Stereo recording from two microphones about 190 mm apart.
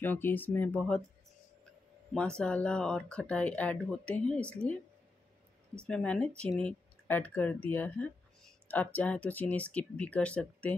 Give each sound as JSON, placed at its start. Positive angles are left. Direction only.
{"t": 0.0, "sound": "speech", "side_deg": 10}
{"t": 2.1, "sound": "speech", "side_deg": 5}
{"t": 5.9, "sound": "speech", "side_deg": 5}